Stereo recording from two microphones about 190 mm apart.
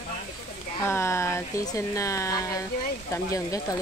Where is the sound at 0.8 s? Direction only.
15° left (ahead or behind).